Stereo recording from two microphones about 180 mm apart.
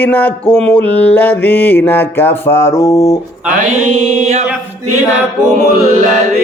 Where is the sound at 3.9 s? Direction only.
5° right (ahead or behind).